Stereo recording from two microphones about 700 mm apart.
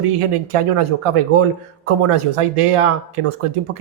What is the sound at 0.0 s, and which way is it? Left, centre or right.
Speech, right.